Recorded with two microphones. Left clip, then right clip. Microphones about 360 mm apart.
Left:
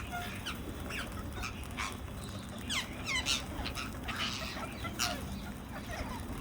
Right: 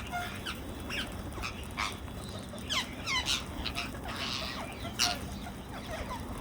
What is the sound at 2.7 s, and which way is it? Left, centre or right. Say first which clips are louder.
Dog: right 3 dB; centre.